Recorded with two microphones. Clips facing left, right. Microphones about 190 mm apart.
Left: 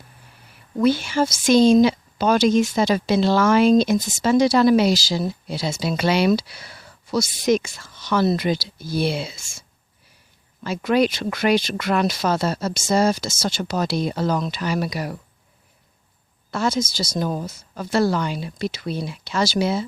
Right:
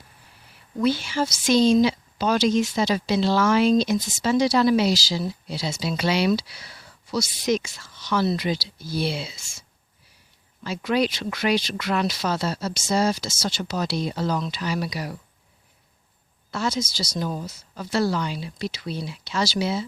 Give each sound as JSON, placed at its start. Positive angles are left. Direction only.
{"t": 0.8, "sound": "a woman's voice", "side_deg": 50}
{"t": 16.5, "sound": "a woman's voice", "side_deg": 50}